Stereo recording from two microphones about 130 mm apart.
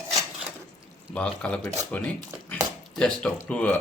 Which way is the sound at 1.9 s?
10° left (ahead or behind).